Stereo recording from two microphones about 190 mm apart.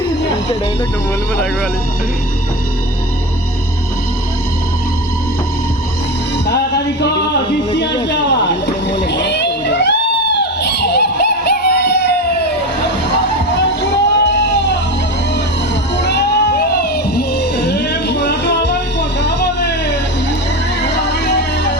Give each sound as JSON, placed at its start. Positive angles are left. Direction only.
{"t": 8.0, "sound": "a sound", "side_deg": 65}
{"t": 13.9, "sound": "music", "side_deg": 70}
{"t": 16.0, "sound": "music", "side_deg": 65}